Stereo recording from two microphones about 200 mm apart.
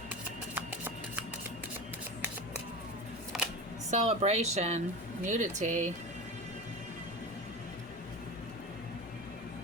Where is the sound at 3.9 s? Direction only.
35° right (ahead or behind).